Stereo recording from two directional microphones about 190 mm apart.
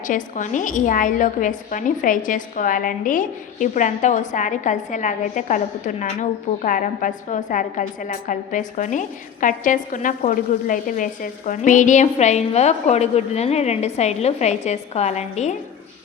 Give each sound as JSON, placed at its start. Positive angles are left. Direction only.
{"t": 0.1, "sound": "a woman's voice", "side_deg": 40}